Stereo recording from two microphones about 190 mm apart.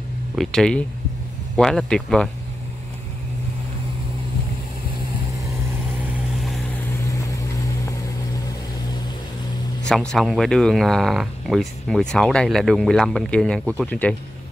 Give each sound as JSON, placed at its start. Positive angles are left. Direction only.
{"t": 0.4, "sound": "speech", "side_deg": 5}
{"t": 6.4, "sound": "vehicle", "side_deg": 0}
{"t": 7.1, "sound": "vehicle", "side_deg": 15}
{"t": 9.8, "sound": "speech", "side_deg": 0}